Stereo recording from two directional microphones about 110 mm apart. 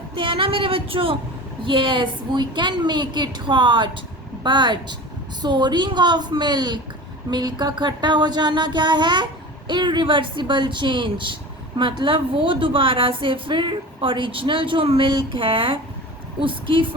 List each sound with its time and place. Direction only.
0.2 s a woman's voice: 55° right (ahead or behind)